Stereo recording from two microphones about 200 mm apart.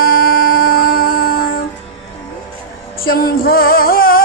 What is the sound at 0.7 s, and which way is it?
Music, 45° left (ahead or behind).